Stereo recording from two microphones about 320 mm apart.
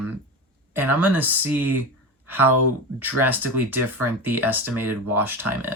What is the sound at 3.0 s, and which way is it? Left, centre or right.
Speech, centre.